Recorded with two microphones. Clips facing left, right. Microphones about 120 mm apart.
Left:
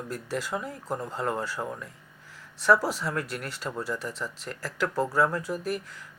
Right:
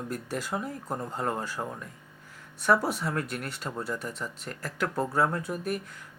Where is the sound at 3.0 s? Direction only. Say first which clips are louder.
Even; 25° right (ahead or behind).